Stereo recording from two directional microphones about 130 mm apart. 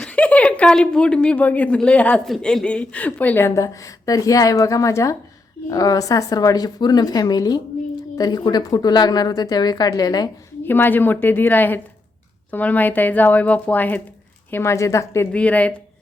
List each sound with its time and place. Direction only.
0.0 s speech: 10° left (ahead or behind); by 10.2 s 30° left (ahead or behind)
10.7 s speech: 15° left (ahead or behind)
15.3 s speech: 10° left (ahead or behind)